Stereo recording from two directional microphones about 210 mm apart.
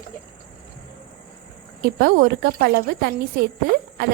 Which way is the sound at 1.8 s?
45° right (ahead or behind).